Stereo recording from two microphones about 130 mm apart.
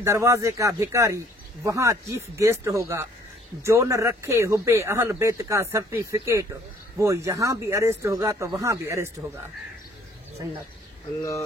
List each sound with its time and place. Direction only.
0.0 s speech: 25° right (ahead or behind)